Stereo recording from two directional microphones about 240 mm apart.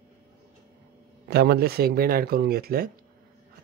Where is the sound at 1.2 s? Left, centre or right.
Right.